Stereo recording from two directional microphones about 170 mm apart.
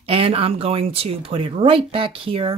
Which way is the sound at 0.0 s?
35° right (ahead or behind).